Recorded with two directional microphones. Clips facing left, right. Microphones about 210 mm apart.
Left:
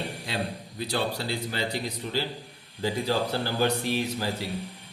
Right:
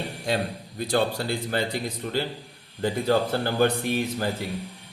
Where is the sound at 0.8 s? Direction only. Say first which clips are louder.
Right 5 dB; 45° right (ahead or behind).